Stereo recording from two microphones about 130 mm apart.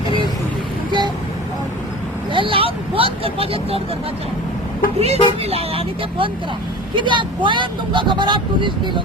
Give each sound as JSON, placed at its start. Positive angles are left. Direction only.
{"t": 0.9, "sound": "vehicle", "side_deg": -35}
{"t": 2.3, "sound": "vehicle", "side_deg": -40}
{"t": 4.9, "sound": "speech", "side_deg": -55}